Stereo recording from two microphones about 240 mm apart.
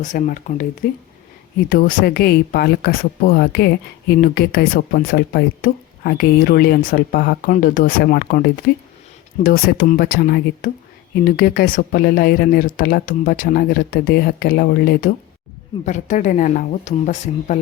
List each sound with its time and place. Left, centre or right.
0.0 s speech: left